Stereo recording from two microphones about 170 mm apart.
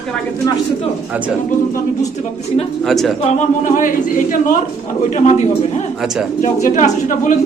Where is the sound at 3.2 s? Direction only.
45° left (ahead or behind).